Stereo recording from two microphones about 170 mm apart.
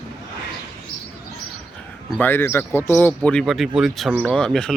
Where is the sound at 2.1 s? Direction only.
10° left (ahead or behind).